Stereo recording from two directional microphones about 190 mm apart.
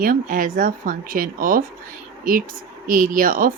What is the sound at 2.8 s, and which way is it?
Speech, 45° right (ahead or behind).